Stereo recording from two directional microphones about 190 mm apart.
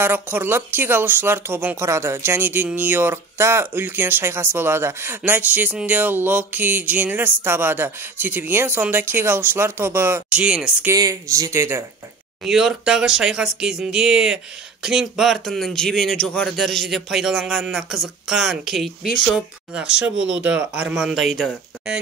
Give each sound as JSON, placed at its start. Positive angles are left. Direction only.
{"t": 0.0, "sound": "speech", "side_deg": -10}
{"t": 10.9, "sound": "speech", "side_deg": -15}
{"t": 12.4, "sound": "speech", "side_deg": 0}